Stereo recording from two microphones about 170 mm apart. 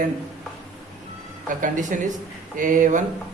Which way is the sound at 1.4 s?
50° right (ahead or behind).